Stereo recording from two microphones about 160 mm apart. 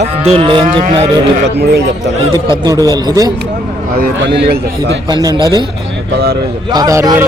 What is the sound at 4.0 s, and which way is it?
Speech, 90° right.